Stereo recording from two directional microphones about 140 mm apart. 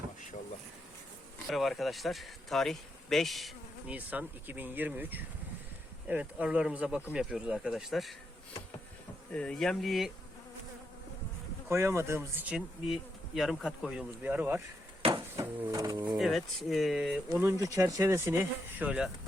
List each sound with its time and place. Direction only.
1.5 s speech: centre (ahead or behind)
3.9 s insect: 10° right (ahead or behind)
9.3 s speech: 5° left (ahead or behind)
11.7 s insect: 20° right (ahead or behind)
15.1 s speech: 25° right (ahead or behind)
16.1 s speech: centre (ahead or behind)
17.4 s insect: 25° right (ahead or behind); by 19.1 s 5° right (ahead or behind)